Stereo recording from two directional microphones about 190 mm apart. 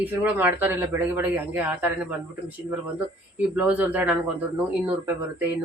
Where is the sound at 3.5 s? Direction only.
10° right (ahead or behind).